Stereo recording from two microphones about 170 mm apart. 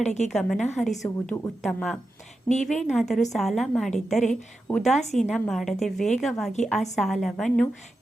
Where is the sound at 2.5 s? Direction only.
45° left (ahead or behind).